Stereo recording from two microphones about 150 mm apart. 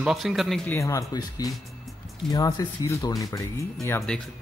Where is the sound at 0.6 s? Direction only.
20° left (ahead or behind).